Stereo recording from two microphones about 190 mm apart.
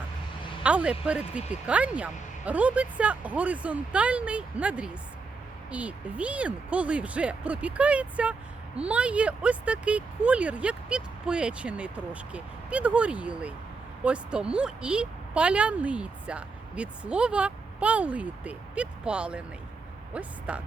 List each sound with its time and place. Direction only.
0.6 s speech: 5° right (ahead or behind)